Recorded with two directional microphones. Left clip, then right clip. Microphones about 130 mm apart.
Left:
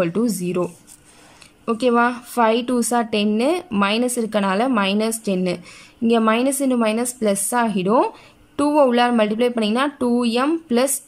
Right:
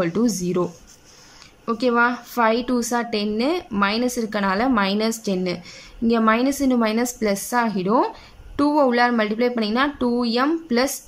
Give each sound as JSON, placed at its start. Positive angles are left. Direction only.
{"t": 0.0, "sound": "speech", "side_deg": 20}
{"t": 1.7, "sound": "a woman's voice", "side_deg": 20}